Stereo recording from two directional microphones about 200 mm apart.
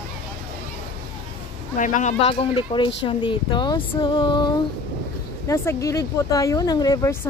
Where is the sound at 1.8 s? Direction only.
40° left (ahead or behind).